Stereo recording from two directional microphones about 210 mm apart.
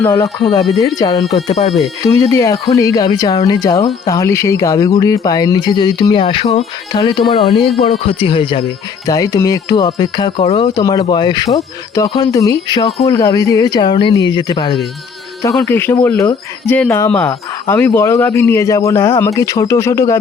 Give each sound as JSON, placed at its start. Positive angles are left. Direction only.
{"t": 0.0, "sound": "speech", "side_deg": 15}
{"t": 0.6, "sound": "speech", "side_deg": 0}
{"t": 0.9, "sound": "speech", "side_deg": 20}
{"t": 1.5, "sound": "speech", "side_deg": 30}
{"t": 2.0, "sound": "speech", "side_deg": 15}
{"t": 15.5, "sound": "speech", "side_deg": 10}